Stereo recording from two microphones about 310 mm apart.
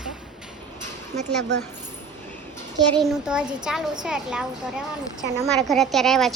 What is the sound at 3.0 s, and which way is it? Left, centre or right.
A child's voice, centre.